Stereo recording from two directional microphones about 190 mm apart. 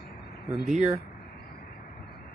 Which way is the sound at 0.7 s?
10° right (ahead or behind).